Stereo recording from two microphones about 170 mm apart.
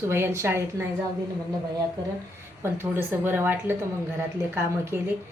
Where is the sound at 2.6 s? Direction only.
10° right (ahead or behind).